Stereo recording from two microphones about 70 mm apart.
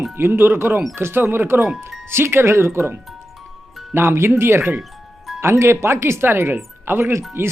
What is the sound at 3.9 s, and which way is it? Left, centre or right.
Speech, right.